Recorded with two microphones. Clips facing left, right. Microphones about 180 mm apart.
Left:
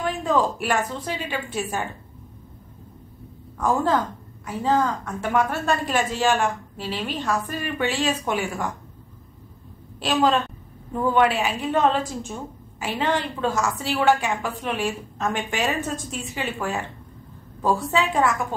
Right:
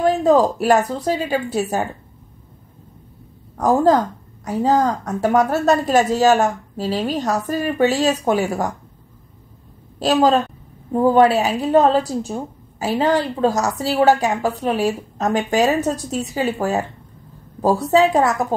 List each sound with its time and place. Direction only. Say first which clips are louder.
0.0 s a woman's voice: right 8 dB; 40° right (ahead or behind)
3.6 s a woman's voice: right 7 dB; 40° right (ahead or behind)
9.9 s a woman's voice: right 5 dB; 40° right (ahead or behind)